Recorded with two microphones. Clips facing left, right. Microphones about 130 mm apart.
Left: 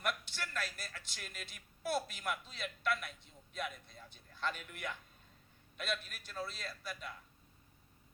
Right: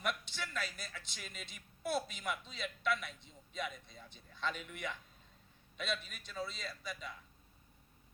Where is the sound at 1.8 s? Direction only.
Centre (ahead or behind).